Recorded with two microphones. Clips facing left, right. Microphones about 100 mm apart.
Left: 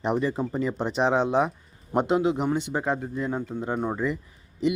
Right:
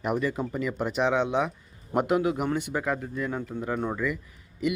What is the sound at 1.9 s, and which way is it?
Speech, 25° left (ahead or behind).